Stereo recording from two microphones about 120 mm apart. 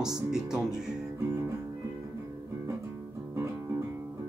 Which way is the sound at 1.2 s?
25° right (ahead or behind).